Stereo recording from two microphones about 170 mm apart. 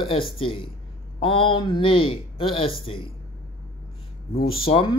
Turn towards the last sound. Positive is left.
turn(degrees=30)  # may be behind; listen again after turning